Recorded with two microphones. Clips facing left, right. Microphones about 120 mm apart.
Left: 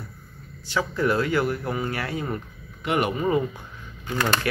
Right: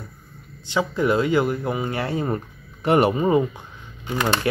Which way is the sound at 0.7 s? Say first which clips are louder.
Right 3 dB; 20° right (ahead or behind).